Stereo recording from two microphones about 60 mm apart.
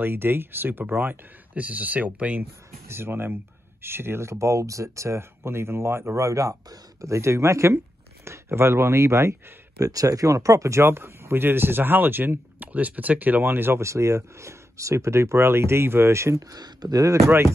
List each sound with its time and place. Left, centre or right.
0.0 s speech: right
2.9 s speech: right
13.8 s speech: right
16.4 s speech: right